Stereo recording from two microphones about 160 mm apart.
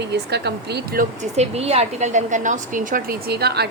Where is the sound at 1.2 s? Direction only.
40° right (ahead or behind); by 3.7 s 85° right.